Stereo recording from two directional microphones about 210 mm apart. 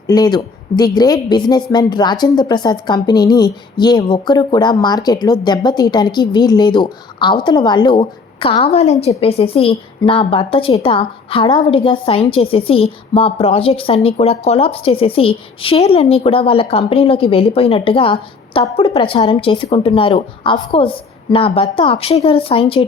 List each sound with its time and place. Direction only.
0.1 s a woman's voice: 20° left (ahead or behind)